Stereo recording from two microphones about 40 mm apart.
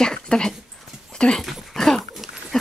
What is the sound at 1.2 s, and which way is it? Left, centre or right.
Speech, left.